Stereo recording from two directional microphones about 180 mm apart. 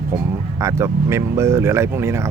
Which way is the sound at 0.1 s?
15° right (ahead or behind).